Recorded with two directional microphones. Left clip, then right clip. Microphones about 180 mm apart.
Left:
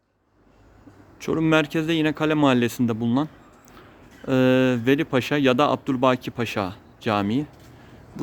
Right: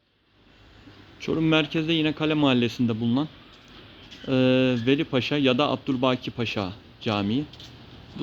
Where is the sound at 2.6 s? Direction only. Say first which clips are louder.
Left 2 dB; 90° left.